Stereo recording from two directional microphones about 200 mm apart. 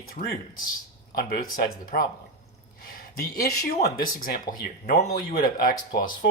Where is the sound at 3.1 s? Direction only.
50° left (ahead or behind).